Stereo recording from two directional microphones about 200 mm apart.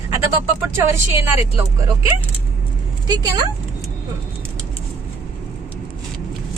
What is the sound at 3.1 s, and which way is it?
Speech, 20° right (ahead or behind).